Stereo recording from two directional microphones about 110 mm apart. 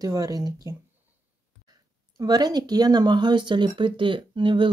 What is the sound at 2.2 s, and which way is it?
Speech, 35° right (ahead or behind).